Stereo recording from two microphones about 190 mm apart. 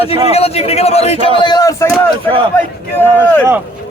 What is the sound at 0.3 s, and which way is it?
A man's voice, 30° left (ahead or behind).